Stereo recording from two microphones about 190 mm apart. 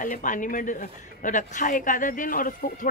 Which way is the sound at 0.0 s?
45° left (ahead or behind).